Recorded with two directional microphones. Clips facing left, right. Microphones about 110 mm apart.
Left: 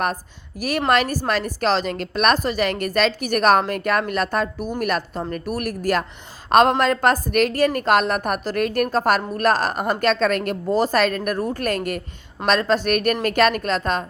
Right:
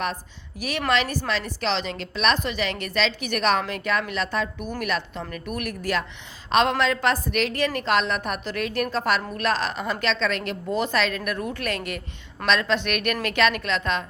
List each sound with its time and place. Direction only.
0.9 s a woman's voice: 45° left (ahead or behind)